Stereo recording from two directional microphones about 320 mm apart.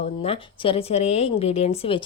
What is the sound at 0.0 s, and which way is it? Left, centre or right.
Speech, centre.